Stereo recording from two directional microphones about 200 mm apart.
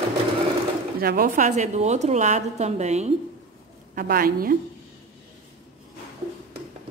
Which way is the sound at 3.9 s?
45° right (ahead or behind).